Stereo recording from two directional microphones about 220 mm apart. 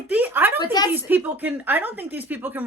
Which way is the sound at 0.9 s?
10° right (ahead or behind).